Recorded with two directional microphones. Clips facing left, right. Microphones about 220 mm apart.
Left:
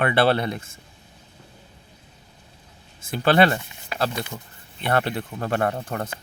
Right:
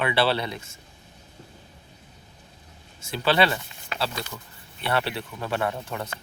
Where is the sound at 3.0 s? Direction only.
50° left (ahead or behind).